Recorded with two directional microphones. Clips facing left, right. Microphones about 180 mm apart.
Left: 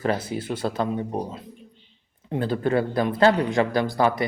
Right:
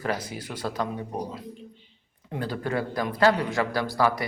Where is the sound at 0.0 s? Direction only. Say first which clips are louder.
Left 5 dB; 25° left (ahead or behind).